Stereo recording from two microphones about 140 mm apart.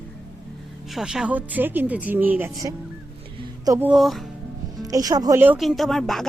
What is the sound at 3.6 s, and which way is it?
Speech, 20° right (ahead or behind).